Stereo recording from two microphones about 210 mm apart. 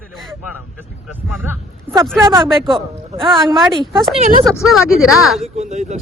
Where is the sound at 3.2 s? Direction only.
Centre (ahead or behind).